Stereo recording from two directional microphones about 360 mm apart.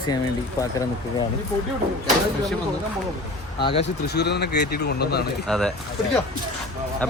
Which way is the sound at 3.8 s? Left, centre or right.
Left.